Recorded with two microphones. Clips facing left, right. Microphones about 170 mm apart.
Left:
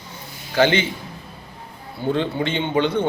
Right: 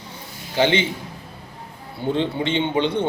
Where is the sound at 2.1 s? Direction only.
25° right (ahead or behind).